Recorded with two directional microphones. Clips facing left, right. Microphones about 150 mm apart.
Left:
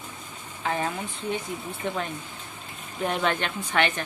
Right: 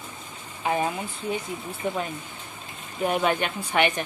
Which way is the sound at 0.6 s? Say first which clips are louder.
Right 3 dB; 15° right (ahead or behind).